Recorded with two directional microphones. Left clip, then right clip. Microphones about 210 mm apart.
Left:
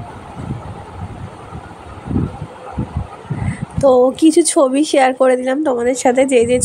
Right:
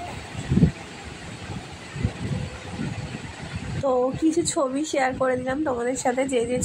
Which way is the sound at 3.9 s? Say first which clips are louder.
Left 11 dB; 25° left (ahead or behind).